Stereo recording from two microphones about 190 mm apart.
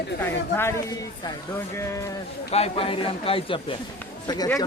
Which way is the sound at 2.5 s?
35° left (ahead or behind).